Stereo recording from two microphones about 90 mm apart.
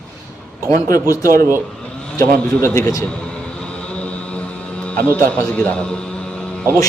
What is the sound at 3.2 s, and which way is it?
Vehicle, 10° left (ahead or behind).